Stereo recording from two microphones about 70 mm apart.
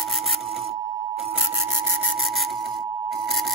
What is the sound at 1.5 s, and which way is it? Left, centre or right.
Sawing, right.